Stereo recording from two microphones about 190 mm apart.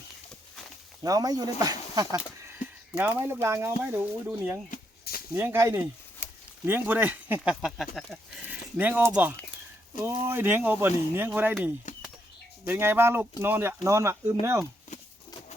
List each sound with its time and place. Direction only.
1.0 s speech: 20° right (ahead or behind)
4.7 s a sound: 50° left (ahead or behind)
5.3 s speech: 15° right (ahead or behind)
11.9 s bird: 40° left (ahead or behind)
12.6 s speech: 10° right (ahead or behind)